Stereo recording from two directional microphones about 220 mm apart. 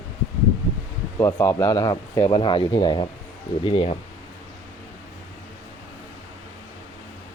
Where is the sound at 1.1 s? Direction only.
10° left (ahead or behind).